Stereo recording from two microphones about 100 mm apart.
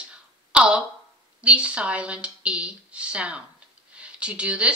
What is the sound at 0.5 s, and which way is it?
Speech, 10° right (ahead or behind).